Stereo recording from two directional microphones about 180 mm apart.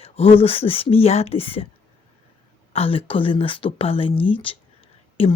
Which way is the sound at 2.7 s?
30° left (ahead or behind).